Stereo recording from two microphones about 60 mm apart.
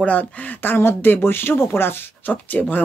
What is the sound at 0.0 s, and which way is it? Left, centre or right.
Speech, left.